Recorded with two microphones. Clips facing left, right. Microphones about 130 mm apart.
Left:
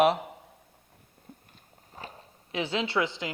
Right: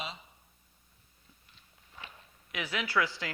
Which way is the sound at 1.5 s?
40° left (ahead or behind).